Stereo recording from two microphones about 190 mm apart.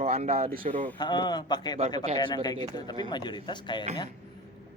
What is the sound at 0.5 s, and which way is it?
Speech, 45° right (ahead or behind).